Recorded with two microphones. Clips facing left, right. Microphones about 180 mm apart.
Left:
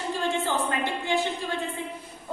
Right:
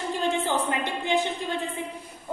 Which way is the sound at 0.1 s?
20° right (ahead or behind).